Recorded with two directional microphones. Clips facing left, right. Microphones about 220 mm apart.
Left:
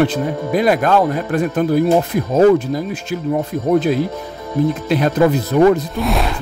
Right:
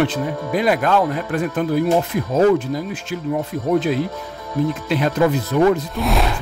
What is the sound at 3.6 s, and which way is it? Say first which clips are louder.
A man's voice: left 3 dB; 40° left (ahead or behind).